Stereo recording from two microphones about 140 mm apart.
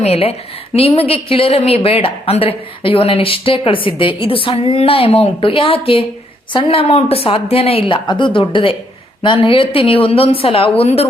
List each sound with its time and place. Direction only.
0.0 s a woman's voice: 45° left (ahead or behind)